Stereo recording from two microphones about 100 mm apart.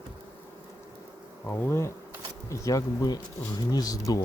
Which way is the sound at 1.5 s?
25° left (ahead or behind).